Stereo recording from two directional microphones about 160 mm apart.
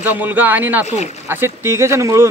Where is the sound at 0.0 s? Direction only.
10° right (ahead or behind).